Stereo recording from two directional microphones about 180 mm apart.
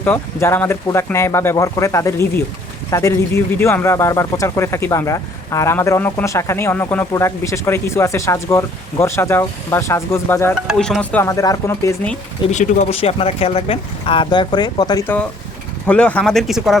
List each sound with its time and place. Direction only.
0.0 s speech: 15° left (ahead or behind)
10.5 s speech: centre (ahead or behind)
12.5 s speech: 40° left (ahead or behind); by 16.7 s centre (ahead or behind)